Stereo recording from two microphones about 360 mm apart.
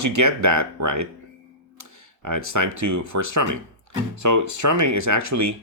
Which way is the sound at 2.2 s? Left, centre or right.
Right.